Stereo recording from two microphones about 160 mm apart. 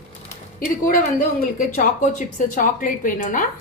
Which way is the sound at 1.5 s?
55° left (ahead or behind).